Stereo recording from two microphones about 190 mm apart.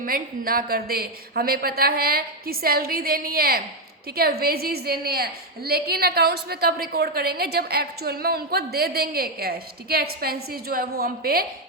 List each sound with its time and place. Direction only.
0.0 s a woman's voice: 50° right (ahead or behind)